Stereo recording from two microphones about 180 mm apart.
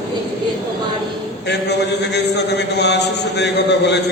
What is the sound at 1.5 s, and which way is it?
A man's voice, 70° left (ahead or behind).